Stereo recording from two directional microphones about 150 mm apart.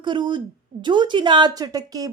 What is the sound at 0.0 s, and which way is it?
A woman's voice, 30° right (ahead or behind).